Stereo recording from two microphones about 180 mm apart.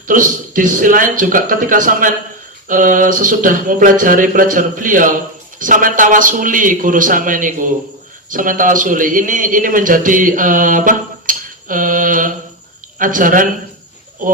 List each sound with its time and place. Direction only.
0.1 s speech: 50° right (ahead or behind)